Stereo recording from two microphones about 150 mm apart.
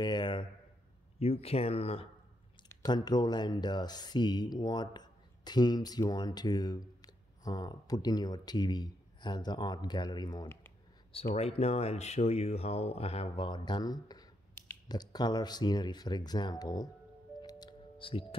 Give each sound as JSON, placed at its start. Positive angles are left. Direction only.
{"t": 0.0, "sound": "speech", "side_deg": 30}
{"t": 1.2, "sound": "speech", "side_deg": 45}
{"t": 2.7, "sound": "speech", "side_deg": 25}
{"t": 11.1, "sound": "speech", "side_deg": 40}
{"t": 17.4, "sound": "music", "side_deg": 30}